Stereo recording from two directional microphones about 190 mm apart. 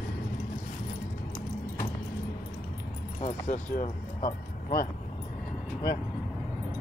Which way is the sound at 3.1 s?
35° left (ahead or behind).